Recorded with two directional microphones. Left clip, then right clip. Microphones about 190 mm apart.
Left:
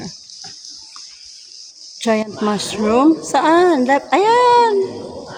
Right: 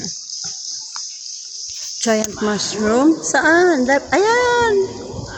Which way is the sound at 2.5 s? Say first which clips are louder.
Even; 30° left (ahead or behind).